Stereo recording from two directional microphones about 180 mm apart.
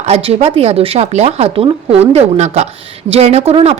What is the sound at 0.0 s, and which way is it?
A woman's voice, 35° right (ahead or behind).